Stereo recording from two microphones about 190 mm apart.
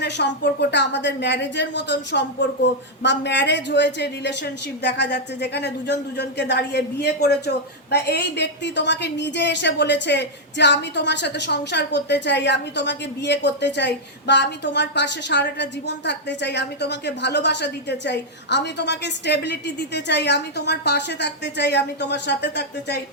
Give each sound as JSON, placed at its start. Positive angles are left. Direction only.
{"t": 0.0, "sound": "a woman's voice", "side_deg": 65}